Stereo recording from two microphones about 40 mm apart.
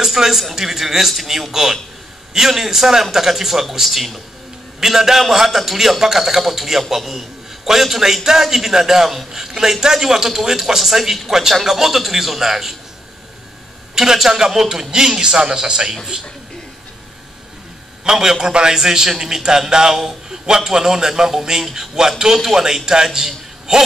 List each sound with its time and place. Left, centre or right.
0.0 s a man's voice: centre
13.9 s a man's voice: centre
18.0 s a man's voice: centre